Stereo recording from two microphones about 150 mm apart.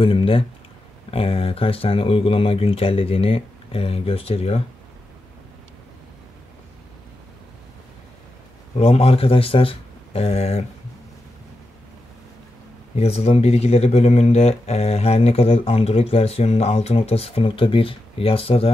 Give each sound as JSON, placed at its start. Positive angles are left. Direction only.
{"t": 0.0, "sound": "speech", "side_deg": 35}
{"t": 8.7, "sound": "speech", "side_deg": 40}
{"t": 12.9, "sound": "speech", "side_deg": 45}